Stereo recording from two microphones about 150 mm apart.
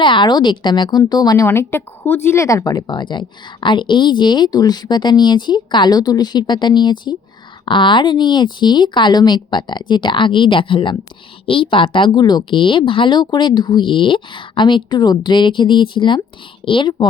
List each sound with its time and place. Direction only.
0.0 s a woman's voice: 30° left (ahead or behind)
1.5 s a woman's voice: 15° left (ahead or behind); by 17.1 s 35° left (ahead or behind)